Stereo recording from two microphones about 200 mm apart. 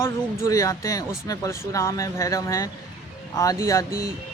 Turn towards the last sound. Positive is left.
turn(degrees=15)  # may be behind; listen again after turning